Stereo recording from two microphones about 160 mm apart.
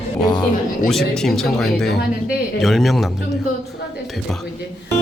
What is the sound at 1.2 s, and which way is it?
Speech, centre (ahead or behind).